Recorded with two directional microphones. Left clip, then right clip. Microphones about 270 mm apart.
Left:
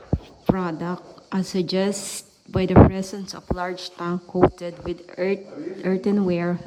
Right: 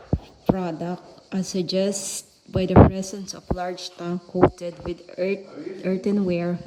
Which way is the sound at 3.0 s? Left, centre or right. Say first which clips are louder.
Left 1 dB; centre.